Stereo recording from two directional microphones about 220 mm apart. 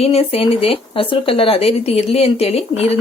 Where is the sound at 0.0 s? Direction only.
25° left (ahead or behind).